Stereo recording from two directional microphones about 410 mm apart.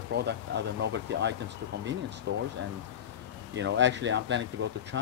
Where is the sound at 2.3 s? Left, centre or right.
Right.